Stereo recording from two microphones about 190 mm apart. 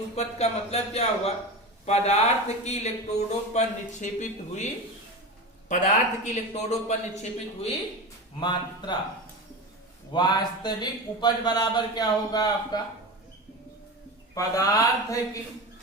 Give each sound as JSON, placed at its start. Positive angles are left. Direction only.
{"t": 0.2, "sound": "speech", "side_deg": 35}
{"t": 8.4, "sound": "speech", "side_deg": 25}
{"t": 10.1, "sound": "speech", "side_deg": 20}
{"t": 14.3, "sound": "speech", "side_deg": 20}